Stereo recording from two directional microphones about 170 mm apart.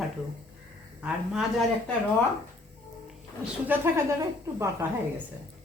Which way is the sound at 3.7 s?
15° right (ahead or behind).